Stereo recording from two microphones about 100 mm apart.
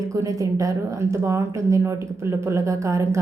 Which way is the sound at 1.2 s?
30° right (ahead or behind).